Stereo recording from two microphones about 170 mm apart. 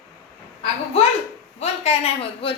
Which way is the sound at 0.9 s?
35° left (ahead or behind).